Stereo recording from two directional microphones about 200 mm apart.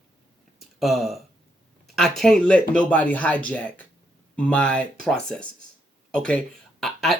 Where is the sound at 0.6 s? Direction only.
Centre (ahead or behind).